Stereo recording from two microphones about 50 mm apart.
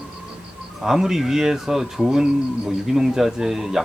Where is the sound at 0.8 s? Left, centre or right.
Centre.